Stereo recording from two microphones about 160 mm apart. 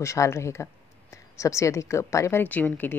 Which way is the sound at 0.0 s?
20° left (ahead or behind).